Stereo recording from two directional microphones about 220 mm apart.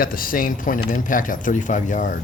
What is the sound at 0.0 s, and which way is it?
Speech, 40° left (ahead or behind).